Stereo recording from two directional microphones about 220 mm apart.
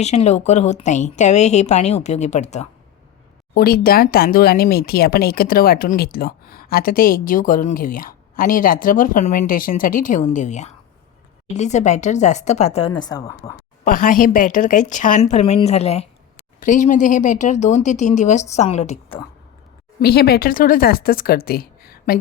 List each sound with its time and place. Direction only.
0.0 s speech: 30° left (ahead or behind)
3.5 s speech: 45° left (ahead or behind); by 13.5 s 15° left (ahead or behind)
13.8 s speech: 40° left (ahead or behind)
20.0 s speech: 45° left (ahead or behind)